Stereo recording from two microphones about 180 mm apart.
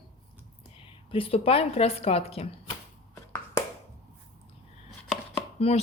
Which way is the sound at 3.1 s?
15° left (ahead or behind).